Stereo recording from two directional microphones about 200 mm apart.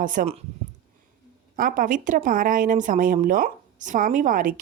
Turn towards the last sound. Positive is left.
turn(degrees=-45)  # may be behind; listen again after turning